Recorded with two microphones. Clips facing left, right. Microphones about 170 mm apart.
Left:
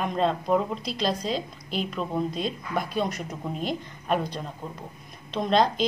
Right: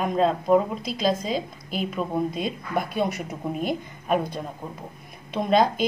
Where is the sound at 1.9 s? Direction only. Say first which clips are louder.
Right 4 dB; 10° right (ahead or behind).